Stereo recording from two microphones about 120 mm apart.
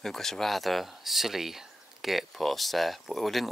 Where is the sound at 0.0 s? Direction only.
5° left (ahead or behind).